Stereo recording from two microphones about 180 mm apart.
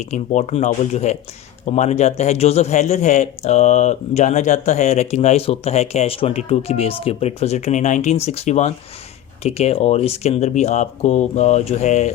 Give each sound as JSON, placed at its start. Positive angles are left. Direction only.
{"t": 0.0, "sound": "a man's voice", "side_deg": 40}